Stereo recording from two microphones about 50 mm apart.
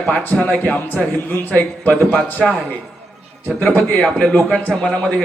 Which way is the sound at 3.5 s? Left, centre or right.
Left.